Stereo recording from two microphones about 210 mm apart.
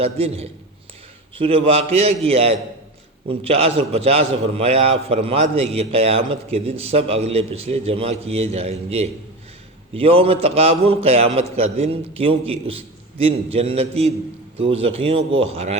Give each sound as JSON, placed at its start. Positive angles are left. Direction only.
{"t": 0.0, "sound": "a man's voice", "side_deg": -30}